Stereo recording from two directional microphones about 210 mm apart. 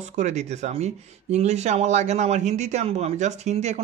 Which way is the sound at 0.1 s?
35° right (ahead or behind).